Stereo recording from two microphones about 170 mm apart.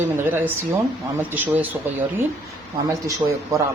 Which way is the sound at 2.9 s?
20° right (ahead or behind).